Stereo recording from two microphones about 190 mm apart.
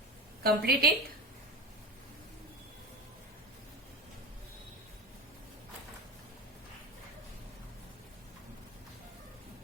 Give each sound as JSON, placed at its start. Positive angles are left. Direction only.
{"t": 0.4, "sound": "a woman's voice", "side_deg": -55}